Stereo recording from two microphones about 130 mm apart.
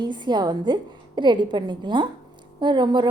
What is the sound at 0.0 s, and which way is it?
A woman's voice, 35° right (ahead or behind).